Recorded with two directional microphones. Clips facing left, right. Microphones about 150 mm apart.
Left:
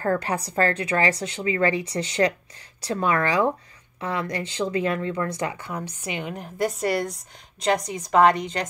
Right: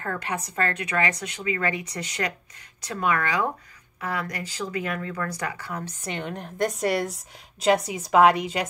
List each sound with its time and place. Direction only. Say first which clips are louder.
0.0 s a woman's voice: left 6 dB; 35° left (ahead or behind); by 5.9 s 20° left (ahead or behind)
6.0 s a woman's voice: right 1 dB; 10° left (ahead or behind)